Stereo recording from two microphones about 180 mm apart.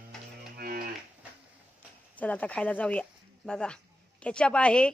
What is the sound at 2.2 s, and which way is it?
Speech, 10° left (ahead or behind).